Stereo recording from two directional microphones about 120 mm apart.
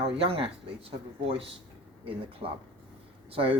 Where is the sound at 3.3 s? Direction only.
50° right (ahead or behind).